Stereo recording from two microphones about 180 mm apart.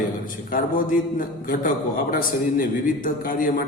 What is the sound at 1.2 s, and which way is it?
A man's voice, 50° left (ahead or behind).